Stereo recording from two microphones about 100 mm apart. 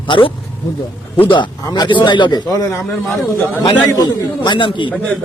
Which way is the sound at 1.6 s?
45° left (ahead or behind).